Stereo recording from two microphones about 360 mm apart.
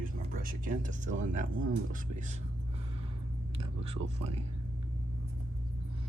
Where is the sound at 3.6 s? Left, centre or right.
Centre.